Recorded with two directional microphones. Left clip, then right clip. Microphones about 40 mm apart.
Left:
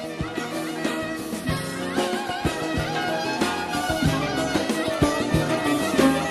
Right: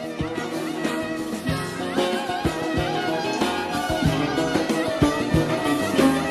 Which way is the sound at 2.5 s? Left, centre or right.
Right.